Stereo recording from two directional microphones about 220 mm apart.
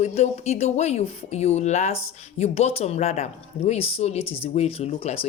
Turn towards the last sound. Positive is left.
turn(degrees=25)  # may be behind; listen again after turning